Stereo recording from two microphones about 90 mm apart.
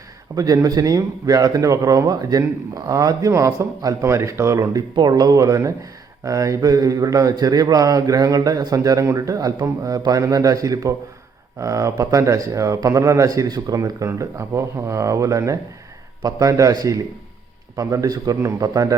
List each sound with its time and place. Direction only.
0.3 s speech: 40° right (ahead or behind)
4.9 s speech: 50° right (ahead or behind)